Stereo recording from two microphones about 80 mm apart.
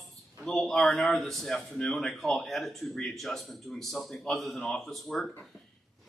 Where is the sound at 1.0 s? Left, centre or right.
Centre.